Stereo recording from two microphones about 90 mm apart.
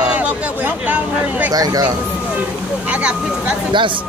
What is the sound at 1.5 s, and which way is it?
Speech, 45° right (ahead or behind).